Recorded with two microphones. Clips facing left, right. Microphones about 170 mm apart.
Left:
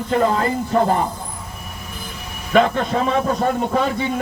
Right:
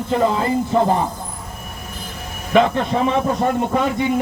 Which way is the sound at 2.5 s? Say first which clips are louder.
Right 1 dB; 5° right (ahead or behind).